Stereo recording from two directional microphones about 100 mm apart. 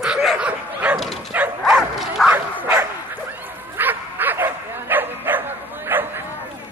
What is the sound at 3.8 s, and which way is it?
Bow-wow, 20° right (ahead or behind).